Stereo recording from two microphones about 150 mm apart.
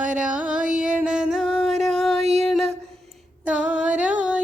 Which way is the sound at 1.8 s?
Centre (ahead or behind).